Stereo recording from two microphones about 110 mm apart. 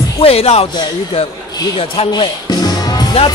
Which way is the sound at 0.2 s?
65° left (ahead or behind).